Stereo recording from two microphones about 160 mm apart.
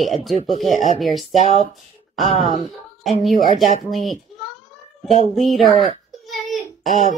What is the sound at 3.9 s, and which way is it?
Speech, centre (ahead or behind).